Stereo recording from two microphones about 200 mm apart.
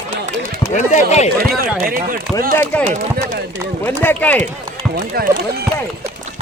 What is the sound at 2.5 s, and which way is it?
Speech, 10° left (ahead or behind).